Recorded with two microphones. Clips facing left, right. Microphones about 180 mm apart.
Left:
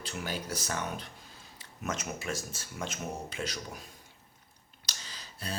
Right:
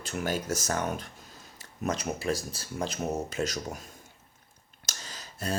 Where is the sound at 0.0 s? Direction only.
45° right (ahead or behind).